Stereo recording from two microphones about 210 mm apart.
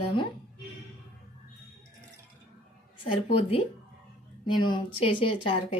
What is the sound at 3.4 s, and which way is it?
A woman's voice, 25° left (ahead or behind).